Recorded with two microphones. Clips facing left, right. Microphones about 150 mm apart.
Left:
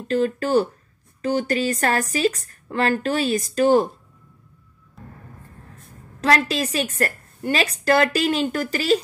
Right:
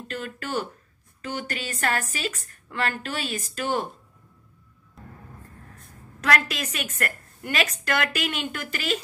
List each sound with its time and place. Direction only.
0.1 s a woman's voice: 35° left (ahead or behind)
6.2 s a woman's voice: 30° left (ahead or behind)